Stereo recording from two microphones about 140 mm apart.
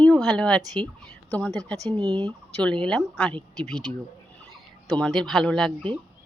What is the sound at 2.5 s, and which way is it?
Speech, 10° left (ahead or behind).